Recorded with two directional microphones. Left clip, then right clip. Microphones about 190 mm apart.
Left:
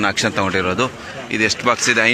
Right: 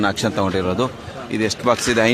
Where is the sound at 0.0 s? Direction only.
20° right (ahead or behind).